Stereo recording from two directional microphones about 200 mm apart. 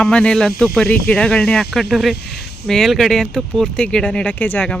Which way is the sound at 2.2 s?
55° left (ahead or behind).